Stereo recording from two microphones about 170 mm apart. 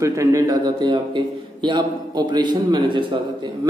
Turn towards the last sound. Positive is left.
turn(degrees=-30)  # may be behind; listen again after turning